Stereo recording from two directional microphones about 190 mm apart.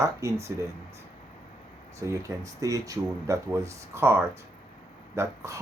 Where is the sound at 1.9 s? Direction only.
15° right (ahead or behind).